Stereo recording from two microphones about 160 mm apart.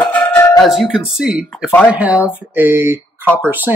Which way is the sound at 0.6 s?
Centre (ahead or behind).